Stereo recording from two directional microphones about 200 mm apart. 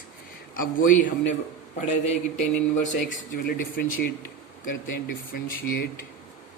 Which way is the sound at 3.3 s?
45° left (ahead or behind).